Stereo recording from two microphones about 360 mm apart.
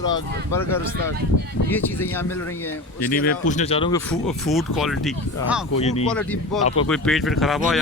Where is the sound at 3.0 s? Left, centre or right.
Left.